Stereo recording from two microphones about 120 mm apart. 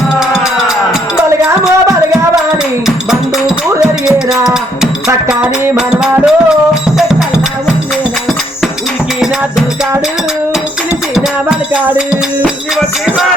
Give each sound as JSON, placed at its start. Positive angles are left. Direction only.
{"t": 1.3, "sound": "a sound", "side_deg": -25}
{"t": 4.0, "sound": "music", "side_deg": -5}
{"t": 11.7, "sound": "music", "side_deg": -10}